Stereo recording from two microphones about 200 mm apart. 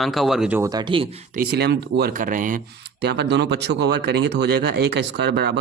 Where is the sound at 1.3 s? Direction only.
55° right (ahead or behind).